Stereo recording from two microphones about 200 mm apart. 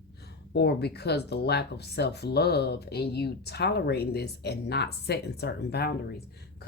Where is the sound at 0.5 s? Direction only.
55° left (ahead or behind).